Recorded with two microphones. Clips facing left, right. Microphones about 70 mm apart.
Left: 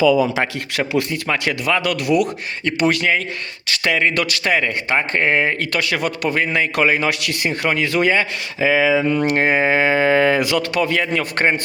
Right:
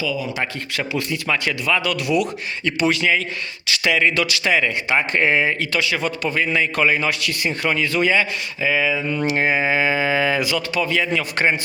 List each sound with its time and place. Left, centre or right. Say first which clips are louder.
0.5 s a man's voice: left 4 dB; left
5.5 s a man's voice: left 1 dB; left
8.5 s speech: left 5 dB; left
9.2 s a man's voice: left 3 dB; left
11.1 s a man's voice: left 1 dB; left